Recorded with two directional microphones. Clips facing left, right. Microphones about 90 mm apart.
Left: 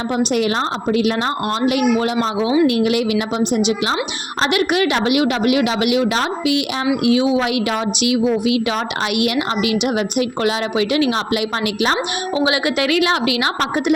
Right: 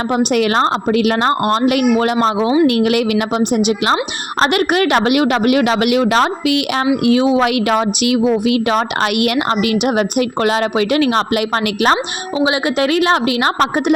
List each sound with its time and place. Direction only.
0.1 s a woman's voice: 60° right (ahead or behind)
2.2 s a woman's voice: 45° right (ahead or behind)
2.6 s a woman's voice: 60° right (ahead or behind)
12.3 s a woman's voice: 30° right (ahead or behind)